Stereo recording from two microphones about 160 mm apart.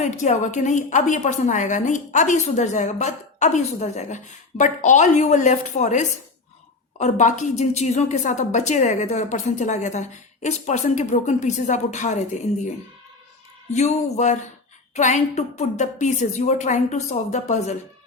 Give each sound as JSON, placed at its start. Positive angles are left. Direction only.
{"t": 0.0, "sound": "a woman's voice", "side_deg": 50}
{"t": 13.7, "sound": "a woman's voice", "side_deg": 45}